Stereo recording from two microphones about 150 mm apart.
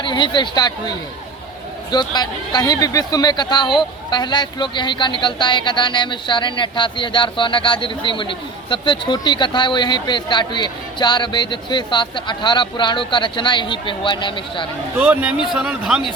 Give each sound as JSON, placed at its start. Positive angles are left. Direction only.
{"t": 0.0, "sound": "speech", "side_deg": 30}
{"t": 14.9, "sound": "a man's voice", "side_deg": -10}